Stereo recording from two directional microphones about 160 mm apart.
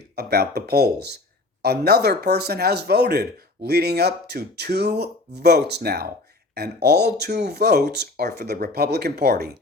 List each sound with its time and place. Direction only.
0.2 s speech: 85° right